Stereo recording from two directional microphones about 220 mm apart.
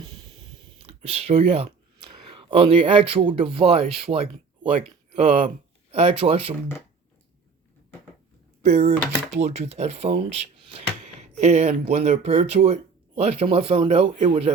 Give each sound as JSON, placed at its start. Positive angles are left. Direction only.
{"t": 0.0, "sound": "a sound", "side_deg": -20}
{"t": 4.6, "sound": "speech", "side_deg": -25}
{"t": 8.6, "sound": "speech", "side_deg": -30}